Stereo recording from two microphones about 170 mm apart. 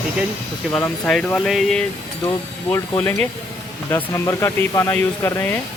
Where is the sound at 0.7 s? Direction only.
15° left (ahead or behind).